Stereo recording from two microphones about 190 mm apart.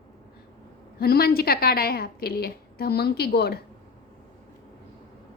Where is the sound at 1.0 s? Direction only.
55° left (ahead or behind).